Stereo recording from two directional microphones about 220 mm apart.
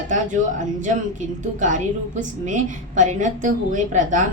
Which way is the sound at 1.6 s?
35° right (ahead or behind).